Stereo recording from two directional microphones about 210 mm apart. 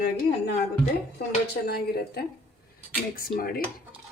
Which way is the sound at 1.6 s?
50° left (ahead or behind).